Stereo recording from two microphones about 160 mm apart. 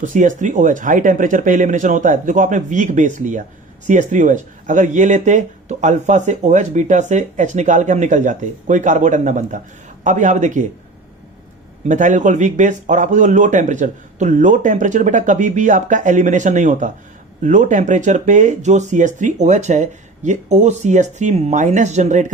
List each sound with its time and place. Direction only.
0.0 s speech: 55° right (ahead or behind)
11.9 s speech: 50° right (ahead or behind)